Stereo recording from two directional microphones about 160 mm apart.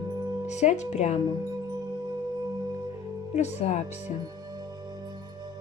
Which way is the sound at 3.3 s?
45° left (ahead or behind).